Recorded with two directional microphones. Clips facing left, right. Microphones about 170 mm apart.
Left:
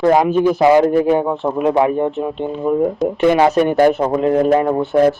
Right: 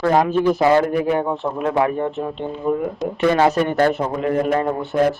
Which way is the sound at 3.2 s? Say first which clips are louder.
Left 3 dB; 15° left (ahead or behind).